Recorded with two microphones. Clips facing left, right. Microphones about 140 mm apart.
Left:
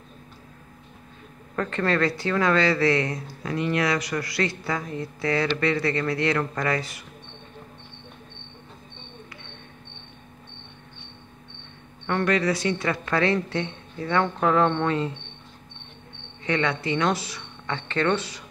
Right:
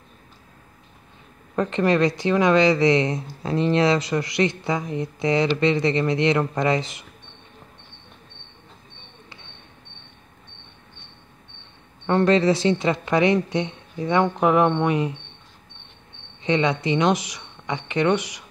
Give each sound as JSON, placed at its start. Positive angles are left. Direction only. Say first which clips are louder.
{"t": 1.5, "sound": "speech", "louder": "right 4 dB", "side_deg": -20}
{"t": 12.1, "sound": "speech", "louder": "right 5 dB", "side_deg": -25}
{"t": 16.4, "sound": "speech", "louder": "right 4 dB", "side_deg": -20}